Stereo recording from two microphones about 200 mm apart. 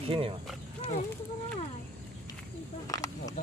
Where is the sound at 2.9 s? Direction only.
15° left (ahead or behind).